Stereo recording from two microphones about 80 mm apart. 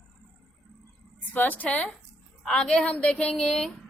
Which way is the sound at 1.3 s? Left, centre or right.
Left.